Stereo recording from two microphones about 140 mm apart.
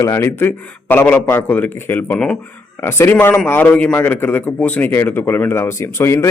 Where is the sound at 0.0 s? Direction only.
20° left (ahead or behind).